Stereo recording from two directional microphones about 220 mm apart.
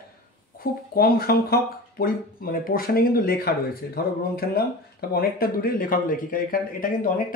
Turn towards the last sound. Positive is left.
turn(degrees=40)  # may be behind; listen again after turning